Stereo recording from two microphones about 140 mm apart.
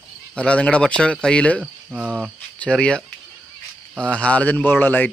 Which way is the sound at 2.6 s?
5° left (ahead or behind).